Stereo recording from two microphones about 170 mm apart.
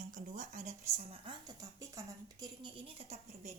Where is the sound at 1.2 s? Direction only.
25° right (ahead or behind).